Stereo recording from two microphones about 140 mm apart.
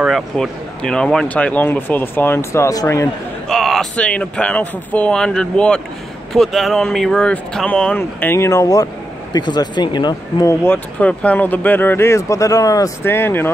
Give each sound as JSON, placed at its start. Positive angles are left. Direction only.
{"t": 0.0, "sound": "speech", "side_deg": 0}
{"t": 3.4, "sound": "speech", "side_deg": 0}